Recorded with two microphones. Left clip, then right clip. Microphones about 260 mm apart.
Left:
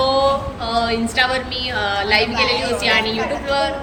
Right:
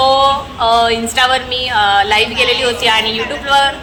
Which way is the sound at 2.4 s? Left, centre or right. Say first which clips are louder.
Right 5 dB; centre.